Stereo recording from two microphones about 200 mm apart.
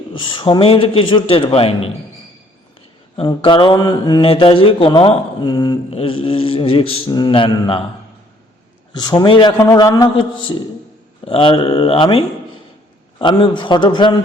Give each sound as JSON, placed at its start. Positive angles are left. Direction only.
{"t": 0.1, "sound": "speech", "side_deg": 25}
{"t": 3.2, "sound": "speech", "side_deg": 25}
{"t": 9.0, "sound": "speech", "side_deg": 20}